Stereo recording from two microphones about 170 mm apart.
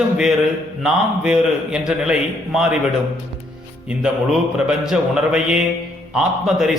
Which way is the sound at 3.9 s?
5° right (ahead or behind).